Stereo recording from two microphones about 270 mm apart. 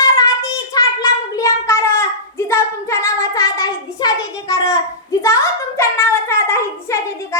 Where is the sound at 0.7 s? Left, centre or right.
Centre.